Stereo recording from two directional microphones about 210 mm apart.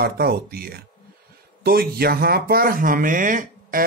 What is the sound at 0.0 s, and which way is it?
Speech, 45° right (ahead or behind).